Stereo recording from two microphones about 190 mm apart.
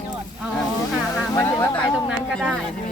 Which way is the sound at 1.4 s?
10° left (ahead or behind).